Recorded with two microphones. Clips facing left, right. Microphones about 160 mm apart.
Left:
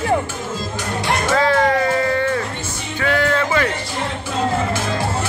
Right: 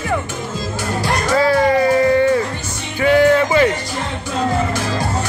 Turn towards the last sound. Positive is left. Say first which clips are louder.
# right 6 dB
turn(degrees=-15)  # may be behind; listen again after turning